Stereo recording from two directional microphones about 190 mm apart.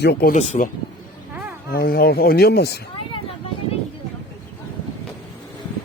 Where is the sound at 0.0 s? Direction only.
60° left (ahead or behind).